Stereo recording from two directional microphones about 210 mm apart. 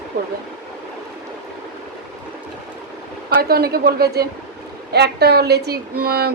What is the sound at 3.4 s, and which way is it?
Speech, 45° right (ahead or behind).